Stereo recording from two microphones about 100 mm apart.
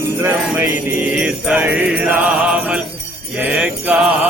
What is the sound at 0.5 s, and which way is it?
Jingle bell, 25° right (ahead or behind).